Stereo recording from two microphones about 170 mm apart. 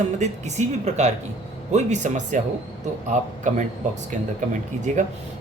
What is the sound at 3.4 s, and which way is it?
Speech, 45° right (ahead or behind).